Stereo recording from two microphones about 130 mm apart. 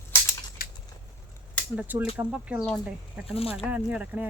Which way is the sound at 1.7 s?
10° right (ahead or behind).